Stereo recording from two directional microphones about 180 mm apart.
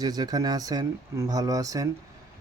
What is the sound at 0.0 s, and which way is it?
Speech, 20° right (ahead or behind).